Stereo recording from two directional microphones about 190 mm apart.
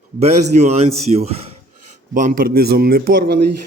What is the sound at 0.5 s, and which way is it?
Speech, 45° right (ahead or behind).